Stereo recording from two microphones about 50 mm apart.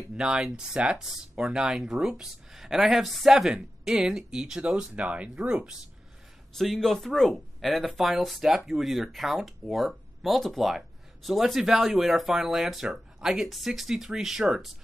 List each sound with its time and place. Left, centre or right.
0.2 s speech: centre
6.5 s speech: centre